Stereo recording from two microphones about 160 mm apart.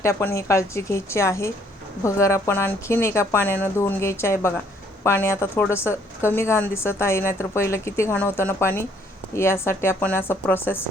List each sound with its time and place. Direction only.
0.0 s a woman's voice: 15° left (ahead or behind)